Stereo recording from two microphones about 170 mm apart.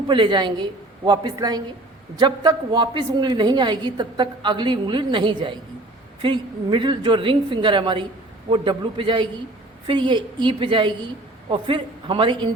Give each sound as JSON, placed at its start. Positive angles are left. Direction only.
{"t": 0.1, "sound": "a woman's voice", "side_deg": -25}